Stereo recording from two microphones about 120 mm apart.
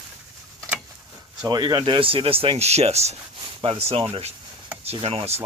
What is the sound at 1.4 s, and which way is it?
Speech, 35° right (ahead or behind).